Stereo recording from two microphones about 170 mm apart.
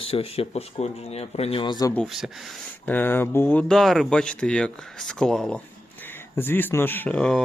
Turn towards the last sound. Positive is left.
turn(degrees=5)  # may be behind; listen again after turning